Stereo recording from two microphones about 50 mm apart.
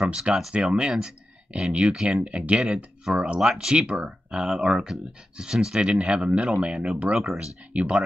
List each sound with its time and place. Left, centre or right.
0.1 s speech: centre
5.8 s speech: right